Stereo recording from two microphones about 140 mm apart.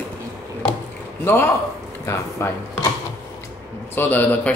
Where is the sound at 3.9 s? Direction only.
15° left (ahead or behind).